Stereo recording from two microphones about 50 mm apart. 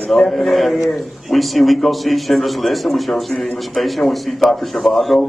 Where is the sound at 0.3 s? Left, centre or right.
Centre.